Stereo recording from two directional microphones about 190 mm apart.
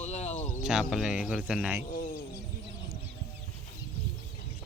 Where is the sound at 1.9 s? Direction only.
45° left (ahead or behind).